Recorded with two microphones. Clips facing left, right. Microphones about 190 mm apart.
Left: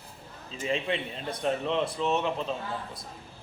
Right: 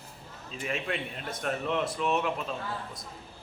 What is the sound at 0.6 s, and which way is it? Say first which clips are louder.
A man's voice: left 3 dB; 25° left (ahead or behind).